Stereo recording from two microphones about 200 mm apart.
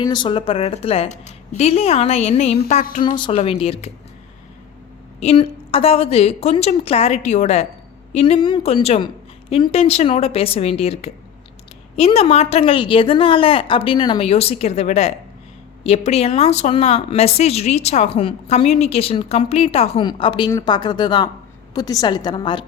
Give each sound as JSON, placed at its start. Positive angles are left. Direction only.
{"t": 0.0, "sound": "speech", "side_deg": 20}
{"t": 3.2, "sound": "a woman's voice", "side_deg": 25}
{"t": 5.2, "sound": "a woman's voice", "side_deg": 30}